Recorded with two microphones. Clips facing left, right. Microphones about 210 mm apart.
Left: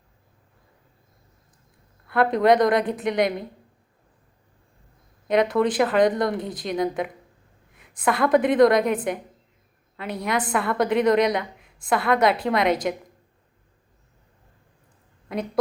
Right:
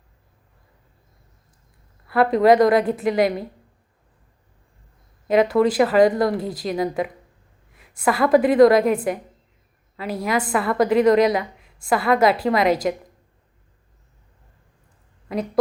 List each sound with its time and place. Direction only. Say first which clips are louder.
2.0 s a woman's voice: right 3 dB; centre (ahead or behind)
5.3 s a woman's voice: right 3 dB; centre (ahead or behind)
10.0 s a woman's voice: right 3 dB; 5° right (ahead or behind)
15.3 s a woman's voice: right 3 dB; centre (ahead or behind)